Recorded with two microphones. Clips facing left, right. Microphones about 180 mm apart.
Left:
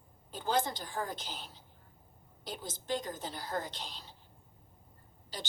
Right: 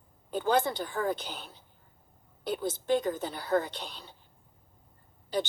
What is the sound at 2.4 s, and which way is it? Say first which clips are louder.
A woman's voice: right 11 dB; 60° right (ahead or behind).